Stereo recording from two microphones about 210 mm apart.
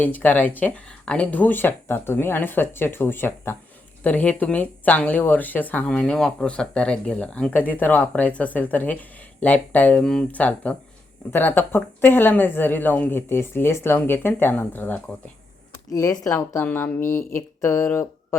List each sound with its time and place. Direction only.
0.0 s speech: 10° left (ahead or behind)